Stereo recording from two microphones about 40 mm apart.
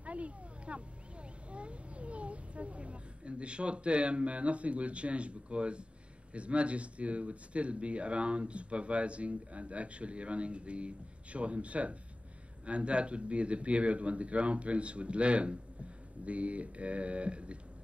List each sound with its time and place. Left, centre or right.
0.0 s speech: right